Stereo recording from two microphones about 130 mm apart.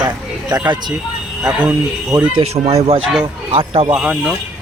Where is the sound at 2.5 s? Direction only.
50° right (ahead or behind).